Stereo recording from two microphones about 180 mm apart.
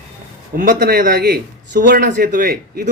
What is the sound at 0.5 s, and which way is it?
Speech, 55° right (ahead or behind).